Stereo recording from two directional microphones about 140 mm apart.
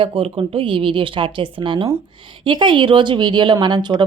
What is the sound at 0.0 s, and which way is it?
Speech, 40° right (ahead or behind).